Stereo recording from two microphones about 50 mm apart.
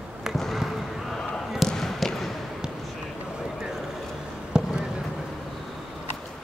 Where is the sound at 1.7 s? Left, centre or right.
Centre.